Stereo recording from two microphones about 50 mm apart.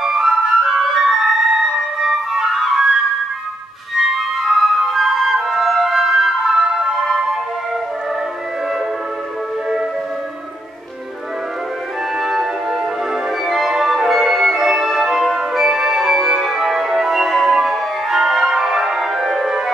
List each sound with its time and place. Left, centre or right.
0.0 s flute: centre
12.2 s music: centre